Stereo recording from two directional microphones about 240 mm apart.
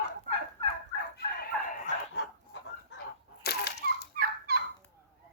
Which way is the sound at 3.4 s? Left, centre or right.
Left.